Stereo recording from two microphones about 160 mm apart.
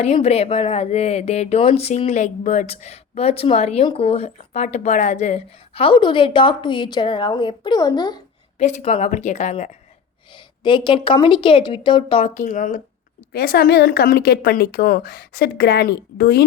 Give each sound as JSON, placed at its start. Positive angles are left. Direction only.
{"t": 0.0, "sound": "a woman's voice", "side_deg": 40}
{"t": 8.5, "sound": "a woman's voice", "side_deg": 45}
{"t": 10.3, "sound": "a woman's voice", "side_deg": 30}
{"t": 12.2, "sound": "a woman's voice", "side_deg": 55}
{"t": 13.3, "sound": "speech", "side_deg": 75}